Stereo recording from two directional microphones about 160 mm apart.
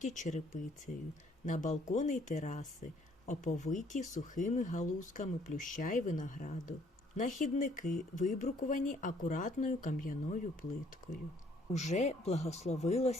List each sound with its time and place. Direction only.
0.0 s speech: 50° left (ahead or behind)